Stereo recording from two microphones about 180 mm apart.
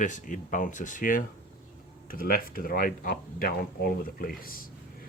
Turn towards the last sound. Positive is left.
turn(degrees=55)  # may be behind; listen again after turning